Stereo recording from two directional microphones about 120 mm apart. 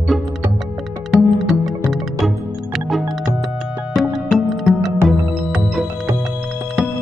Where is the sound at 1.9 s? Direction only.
Centre (ahead or behind).